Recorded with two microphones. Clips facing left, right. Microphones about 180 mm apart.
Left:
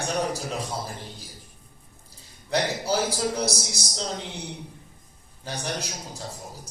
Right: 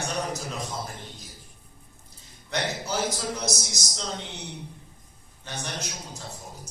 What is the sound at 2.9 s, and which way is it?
A man's voice, 35° left (ahead or behind).